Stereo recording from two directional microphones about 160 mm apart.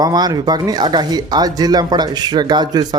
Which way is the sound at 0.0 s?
25° right (ahead or behind).